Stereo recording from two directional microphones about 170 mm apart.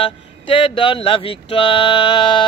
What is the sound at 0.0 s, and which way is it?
Speech, 30° left (ahead or behind).